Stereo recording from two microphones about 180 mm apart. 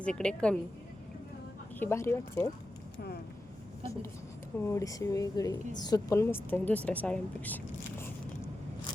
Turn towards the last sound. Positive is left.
turn(degrees=10)  # may be behind; listen again after turning